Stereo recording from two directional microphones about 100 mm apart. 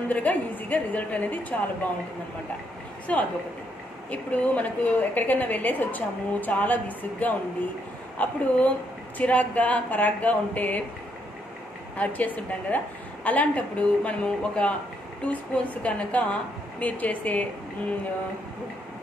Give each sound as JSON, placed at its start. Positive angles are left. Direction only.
{"t": 0.1, "sound": "a woman's voice", "side_deg": 15}
{"t": 3.1, "sound": "a woman's voice", "side_deg": 15}
{"t": 12.0, "sound": "a woman's voice", "side_deg": 15}